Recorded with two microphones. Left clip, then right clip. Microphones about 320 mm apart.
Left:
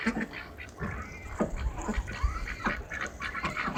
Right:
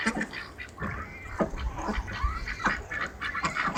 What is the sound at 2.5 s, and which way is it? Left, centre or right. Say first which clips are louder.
Duck: right 4 dB; right.